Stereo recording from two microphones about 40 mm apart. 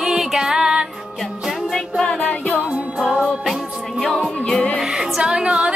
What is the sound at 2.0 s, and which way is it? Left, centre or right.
Music, left.